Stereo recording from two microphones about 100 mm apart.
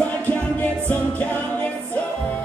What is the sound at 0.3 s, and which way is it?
Music, 15° left (ahead or behind).